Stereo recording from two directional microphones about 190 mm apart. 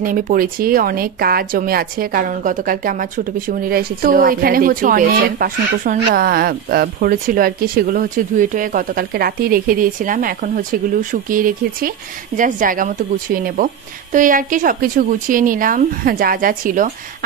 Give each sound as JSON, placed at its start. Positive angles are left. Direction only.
{"t": 0.0, "sound": "speech", "side_deg": -45}